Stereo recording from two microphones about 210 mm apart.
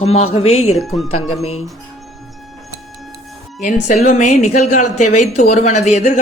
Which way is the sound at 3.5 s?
35° left (ahead or behind).